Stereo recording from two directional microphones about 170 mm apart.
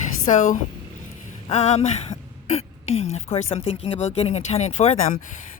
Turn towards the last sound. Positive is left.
turn(degrees=40)  # may be behind; listen again after turning